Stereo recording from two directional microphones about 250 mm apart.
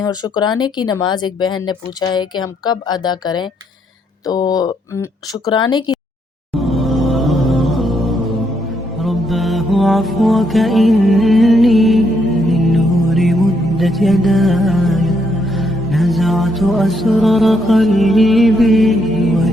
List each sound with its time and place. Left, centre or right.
0.0 s speech: centre
6.6 s music: centre